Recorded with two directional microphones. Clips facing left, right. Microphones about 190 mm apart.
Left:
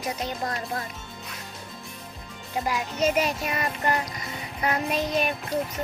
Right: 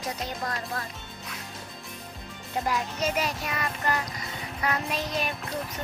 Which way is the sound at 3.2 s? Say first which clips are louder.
Left 4 dB; 25° left (ahead or behind).